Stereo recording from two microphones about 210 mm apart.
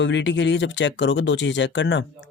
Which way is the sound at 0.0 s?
60° left (ahead or behind).